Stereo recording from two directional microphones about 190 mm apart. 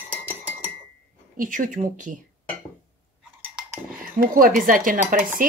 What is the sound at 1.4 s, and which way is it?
Speech, 45° right (ahead or behind).